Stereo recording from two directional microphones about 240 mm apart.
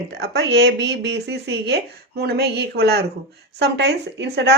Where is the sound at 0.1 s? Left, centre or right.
Right.